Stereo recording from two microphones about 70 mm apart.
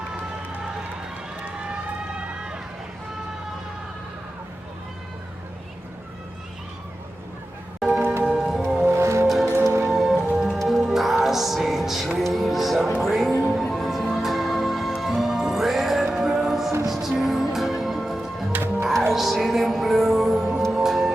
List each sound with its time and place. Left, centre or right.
1.7 s run: centre
7.9 s music: right
8.2 s music: centre
8.9 s music: right
9.2 s music: centre
18.5 s music: right
19.1 s music: centre